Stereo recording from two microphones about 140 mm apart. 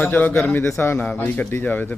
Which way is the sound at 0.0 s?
15° left (ahead or behind).